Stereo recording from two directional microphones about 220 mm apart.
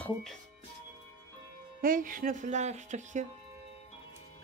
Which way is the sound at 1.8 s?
40° right (ahead or behind).